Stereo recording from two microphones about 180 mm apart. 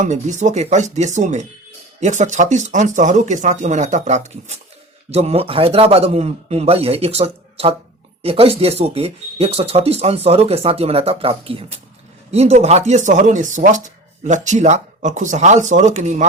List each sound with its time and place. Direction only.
0.0 s speech: 40° right (ahead or behind)